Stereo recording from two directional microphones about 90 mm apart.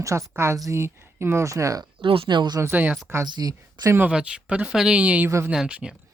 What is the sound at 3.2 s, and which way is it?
Speech, 50° right (ahead or behind).